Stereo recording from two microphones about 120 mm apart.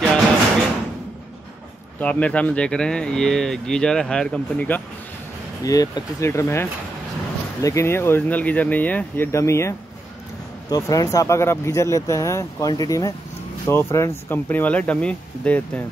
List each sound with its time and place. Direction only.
2.0 s speech: 10° left (ahead or behind)
5.6 s speech: 30° left (ahead or behind); by 15.8 s 10° left (ahead or behind)